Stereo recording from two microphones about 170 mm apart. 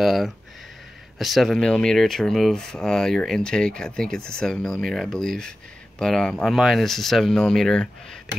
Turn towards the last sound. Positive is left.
turn(degrees=5)  # may be behind; listen again after turning